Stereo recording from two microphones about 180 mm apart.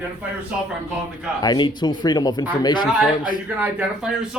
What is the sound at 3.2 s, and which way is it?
Speech, 50° left (ahead or behind).